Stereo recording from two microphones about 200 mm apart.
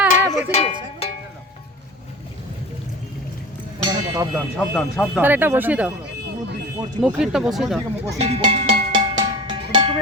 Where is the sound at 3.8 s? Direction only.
20° right (ahead or behind).